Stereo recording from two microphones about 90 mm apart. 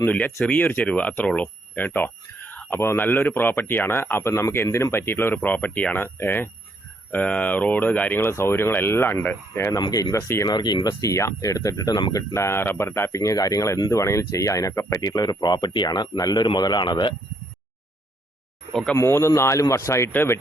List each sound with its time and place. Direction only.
0.0 s speech: 15° left (ahead or behind)
9.8 s speech: 40° left (ahead or behind)
10.5 s speech: 55° left (ahead or behind)
11.0 s speech: 35° left (ahead or behind)
12.1 s speech: 35° left (ahead or behind); by 17.2 s 60° left (ahead or behind)
18.7 s speech: 5° left (ahead or behind)
18.9 s speech: 30° left (ahead or behind)